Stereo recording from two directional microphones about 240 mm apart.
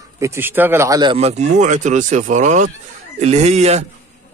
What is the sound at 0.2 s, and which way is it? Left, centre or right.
Speech, centre.